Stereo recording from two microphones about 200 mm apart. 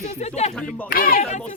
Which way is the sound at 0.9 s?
45° left (ahead or behind).